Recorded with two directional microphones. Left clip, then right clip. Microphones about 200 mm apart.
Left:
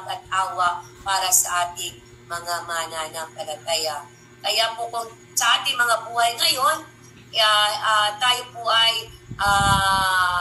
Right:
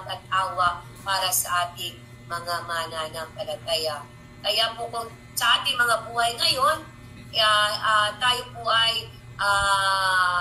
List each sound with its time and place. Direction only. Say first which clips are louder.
0.0 s a woman's voice: left 1 dB; 15° left (ahead or behind)